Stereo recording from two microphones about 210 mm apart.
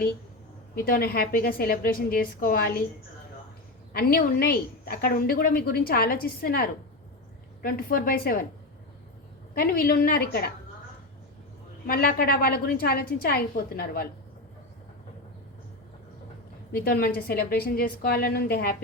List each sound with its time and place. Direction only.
0.9 s a woman's voice: 45° left (ahead or behind)
3.9 s a woman's voice: 45° left (ahead or behind)
9.6 s a woman's voice: 45° left (ahead or behind)
11.9 s a woman's voice: 45° left (ahead or behind)
16.7 s a woman's voice: 45° left (ahead or behind)